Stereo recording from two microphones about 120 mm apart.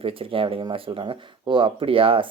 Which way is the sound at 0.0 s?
50° right (ahead or behind).